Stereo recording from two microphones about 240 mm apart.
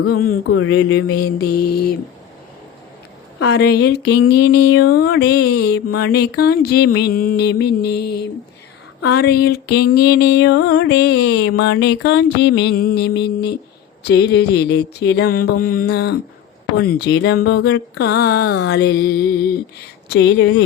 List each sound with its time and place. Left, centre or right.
0.1 s mantra: left
0.5 s mantra: left
1.4 s mantra: left
3.4 s speech: left
16.7 s mantra: left
17.1 s speech: left